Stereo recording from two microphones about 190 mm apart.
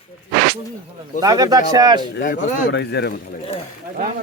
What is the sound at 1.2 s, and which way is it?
Speech, 20° right (ahead or behind).